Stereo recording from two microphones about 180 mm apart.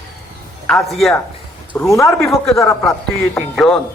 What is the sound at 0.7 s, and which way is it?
Speech, centre (ahead or behind).